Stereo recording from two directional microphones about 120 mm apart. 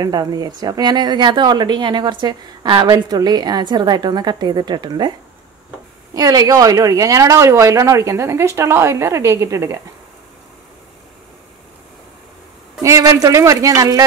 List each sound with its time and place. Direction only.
0.0 s a woman's voice: 35° right (ahead or behind)
6.1 s speech: 30° right (ahead or behind)
12.8 s speech: 25° right (ahead or behind)